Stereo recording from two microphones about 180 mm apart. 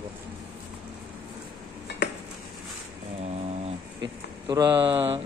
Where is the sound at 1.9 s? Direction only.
70° left (ahead or behind).